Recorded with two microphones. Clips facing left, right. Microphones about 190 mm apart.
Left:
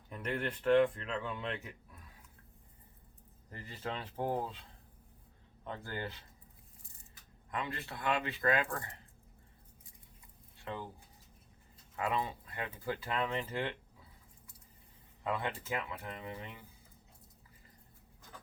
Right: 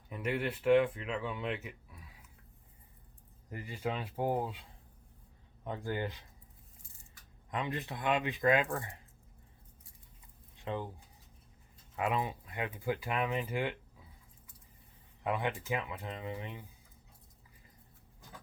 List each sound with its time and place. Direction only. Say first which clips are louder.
0.1 s speech: right 3 dB; 5° right (ahead or behind)
3.5 s speech: right 4 dB; 10° right (ahead or behind)
5.6 s speech: right 5 dB; 15° right (ahead or behind)
7.5 s speech: right 3 dB; 20° right (ahead or behind)
10.6 s speech: right 4 dB; 15° right (ahead or behind)
11.9 s speech: right 2 dB; 15° right (ahead or behind)
15.2 s speech: right 3 dB; 15° right (ahead or behind)